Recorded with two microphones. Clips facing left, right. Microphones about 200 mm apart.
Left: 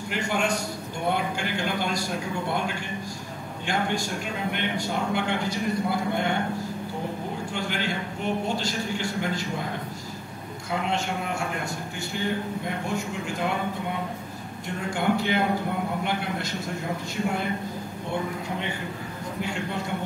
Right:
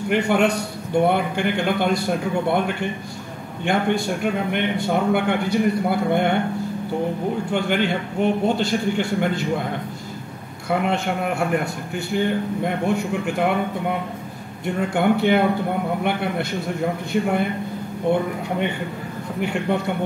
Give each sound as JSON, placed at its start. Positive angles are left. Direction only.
{"t": 0.1, "sound": "a man's voice", "side_deg": -60}
{"t": 7.5, "sound": "a man's voice", "side_deg": -60}
{"t": 10.7, "sound": "a man's voice", "side_deg": -60}
{"t": 14.9, "sound": "a man's voice", "side_deg": -60}
{"t": 19.4, "sound": "a man's voice", "side_deg": -60}